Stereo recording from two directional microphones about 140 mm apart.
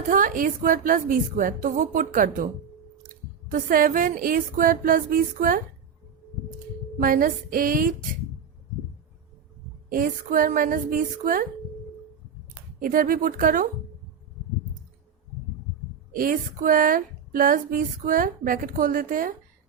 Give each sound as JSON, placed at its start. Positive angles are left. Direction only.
{"t": 0.1, "sound": "a woman's voice", "side_deg": -75}
{"t": 3.5, "sound": "speech", "side_deg": -80}
{"t": 7.0, "sound": "speech", "side_deg": -80}
{"t": 9.9, "sound": "speech", "side_deg": -85}
{"t": 12.8, "sound": "speech", "side_deg": -80}
{"t": 16.1, "sound": "speech", "side_deg": -80}